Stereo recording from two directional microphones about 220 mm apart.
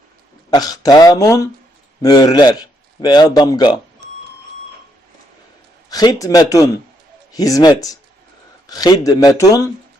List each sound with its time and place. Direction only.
0.5 s a man's voice: 15° left (ahead or behind)
5.9 s speech: 15° left (ahead or behind)